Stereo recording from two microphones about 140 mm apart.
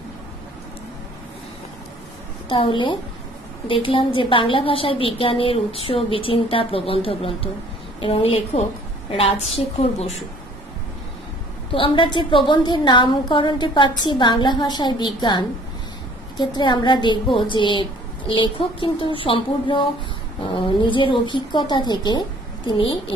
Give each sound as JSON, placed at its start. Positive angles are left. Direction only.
{"t": 2.5, "sound": "a woman's voice", "side_deg": 35}
{"t": 11.7, "sound": "a woman's voice", "side_deg": 35}